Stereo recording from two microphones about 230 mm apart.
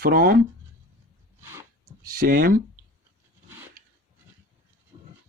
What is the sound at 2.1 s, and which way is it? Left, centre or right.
Speech, right.